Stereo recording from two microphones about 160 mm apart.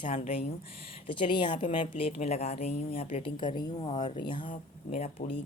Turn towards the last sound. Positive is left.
turn(degrees=45)  # may be behind; listen again after turning